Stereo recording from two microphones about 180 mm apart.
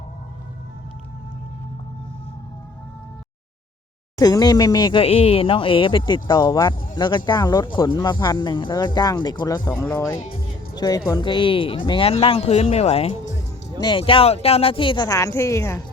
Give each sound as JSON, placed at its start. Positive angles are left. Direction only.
{"t": 4.2, "sound": "speech", "side_deg": 20}
{"t": 9.6, "sound": "speech", "side_deg": 10}